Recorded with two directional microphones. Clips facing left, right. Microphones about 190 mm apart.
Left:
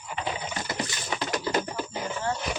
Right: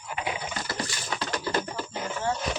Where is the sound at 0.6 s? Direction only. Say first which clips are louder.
Left 1 dB; 20° left (ahead or behind).